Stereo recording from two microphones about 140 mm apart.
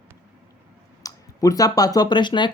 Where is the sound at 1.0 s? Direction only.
25° left (ahead or behind).